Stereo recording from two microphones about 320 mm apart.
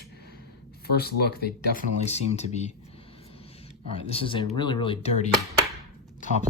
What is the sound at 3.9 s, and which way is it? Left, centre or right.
Speech, centre.